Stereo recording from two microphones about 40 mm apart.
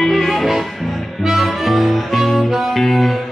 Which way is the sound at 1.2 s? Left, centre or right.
Centre.